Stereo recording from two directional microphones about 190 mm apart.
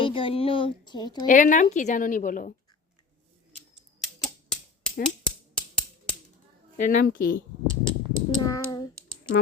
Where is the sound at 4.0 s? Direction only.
Centre (ahead or behind).